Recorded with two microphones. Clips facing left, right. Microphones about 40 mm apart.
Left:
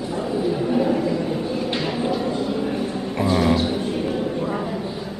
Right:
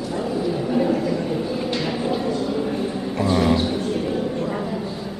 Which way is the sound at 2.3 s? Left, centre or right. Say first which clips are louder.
Even; centre.